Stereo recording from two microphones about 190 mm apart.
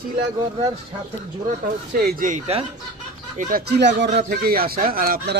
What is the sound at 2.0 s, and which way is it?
Speech, 50° right (ahead or behind).